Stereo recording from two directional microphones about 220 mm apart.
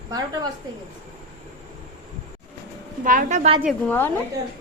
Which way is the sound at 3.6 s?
10° left (ahead or behind).